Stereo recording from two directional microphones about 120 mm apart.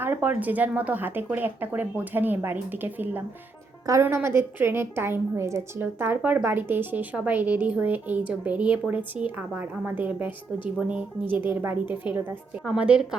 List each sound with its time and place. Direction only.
0.0 s a woman's voice: 15° right (ahead or behind)